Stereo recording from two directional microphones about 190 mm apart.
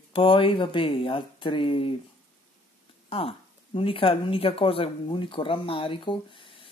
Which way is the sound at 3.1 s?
30° left (ahead or behind).